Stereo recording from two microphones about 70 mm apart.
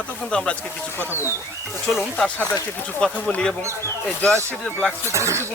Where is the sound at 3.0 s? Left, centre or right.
Centre.